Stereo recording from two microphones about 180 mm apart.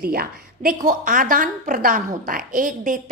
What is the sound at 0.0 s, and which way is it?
A woman's voice, 55° right (ahead or behind).